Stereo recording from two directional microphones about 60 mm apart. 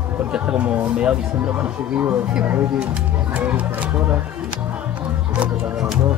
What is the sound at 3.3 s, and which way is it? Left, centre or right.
Speech, right.